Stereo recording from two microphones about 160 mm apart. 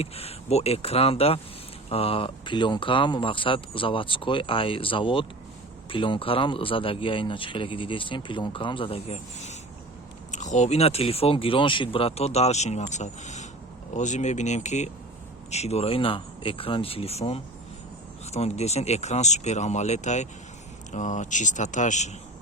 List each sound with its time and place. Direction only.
0.0 s speech: 40° left (ahead or behind)